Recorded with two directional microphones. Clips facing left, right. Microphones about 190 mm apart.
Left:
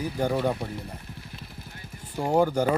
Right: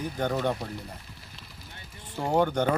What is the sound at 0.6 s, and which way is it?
Speech, 55° left (ahead or behind).